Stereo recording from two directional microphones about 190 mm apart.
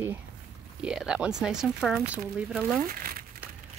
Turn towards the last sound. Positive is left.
turn(degrees=-50)  # may be behind; listen again after turning